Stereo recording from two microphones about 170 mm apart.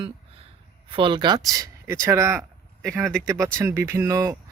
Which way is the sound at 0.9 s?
30° right (ahead or behind).